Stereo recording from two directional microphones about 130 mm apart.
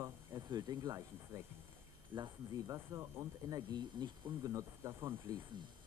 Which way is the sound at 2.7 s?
25° right (ahead or behind).